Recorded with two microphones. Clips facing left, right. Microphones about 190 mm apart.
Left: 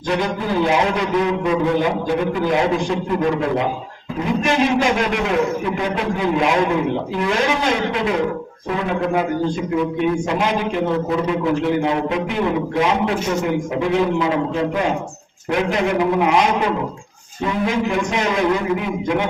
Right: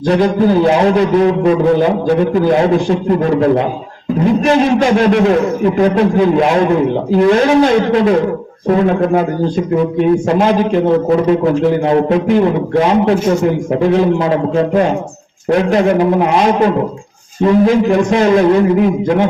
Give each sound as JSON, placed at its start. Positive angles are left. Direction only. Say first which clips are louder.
{"t": 0.1, "sound": "a man's voice", "louder": "right 9 dB", "side_deg": -35}
{"t": 4.4, "sound": "a man's voice", "louder": "right 4 dB", "side_deg": -35}